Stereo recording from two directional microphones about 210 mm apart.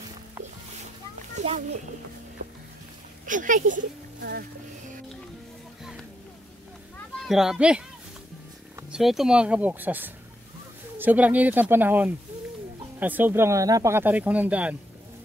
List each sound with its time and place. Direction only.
1.3 s a sound: 30° right (ahead or behind)
3.3 s speech: 40° right (ahead or behind)
7.2 s a child's voice: centre (ahead or behind)